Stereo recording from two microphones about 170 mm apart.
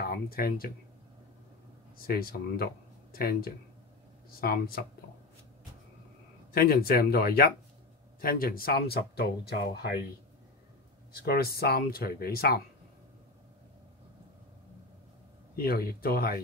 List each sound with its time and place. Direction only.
0.0 s speech: 60° left (ahead or behind)
2.0 s speech: 60° left (ahead or behind)
6.5 s speech: 60° left (ahead or behind)
11.2 s speech: 65° left (ahead or behind)
15.6 s speech: 60° left (ahead or behind)